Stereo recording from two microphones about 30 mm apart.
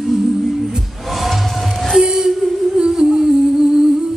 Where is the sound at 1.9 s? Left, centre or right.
Centre.